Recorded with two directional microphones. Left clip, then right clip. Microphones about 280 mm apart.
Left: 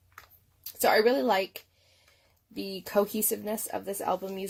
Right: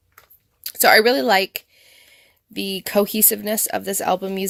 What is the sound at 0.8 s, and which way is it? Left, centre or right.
Speech, right.